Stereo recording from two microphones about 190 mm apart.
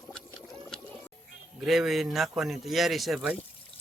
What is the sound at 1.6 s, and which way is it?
Speech, centre (ahead or behind).